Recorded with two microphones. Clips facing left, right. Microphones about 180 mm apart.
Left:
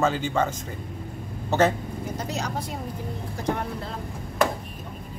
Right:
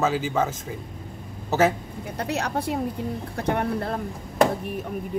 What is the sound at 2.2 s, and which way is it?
Speech, 60° right (ahead or behind).